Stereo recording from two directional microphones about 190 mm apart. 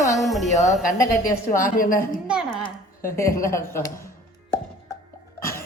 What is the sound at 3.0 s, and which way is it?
Speech, 50° left (ahead or behind).